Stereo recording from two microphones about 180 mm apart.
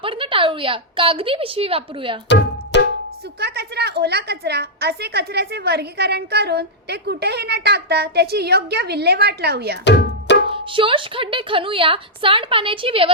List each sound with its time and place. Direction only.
0.0 s a woman's voice: 30° right (ahead or behind)
2.7 s music: 75° left (ahead or behind)
3.4 s a woman's voice: 65° right (ahead or behind)
10.5 s a woman's voice: 30° right (ahead or behind)